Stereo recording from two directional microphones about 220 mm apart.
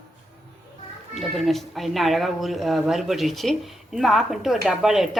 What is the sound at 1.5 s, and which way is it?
Speech, centre (ahead or behind).